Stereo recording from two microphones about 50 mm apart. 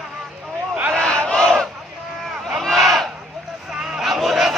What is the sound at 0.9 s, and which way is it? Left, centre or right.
Battle cry, centre.